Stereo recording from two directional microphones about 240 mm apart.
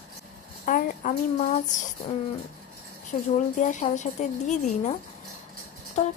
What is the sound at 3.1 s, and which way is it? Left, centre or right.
A woman's voice, left.